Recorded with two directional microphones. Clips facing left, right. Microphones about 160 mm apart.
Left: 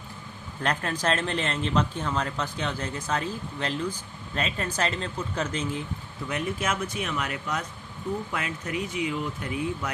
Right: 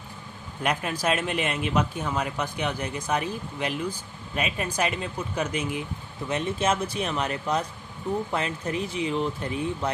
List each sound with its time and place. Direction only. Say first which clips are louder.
0.6 s speech: right 1 dB; 10° right (ahead or behind)
6.2 s speech: right 4 dB; 25° right (ahead or behind)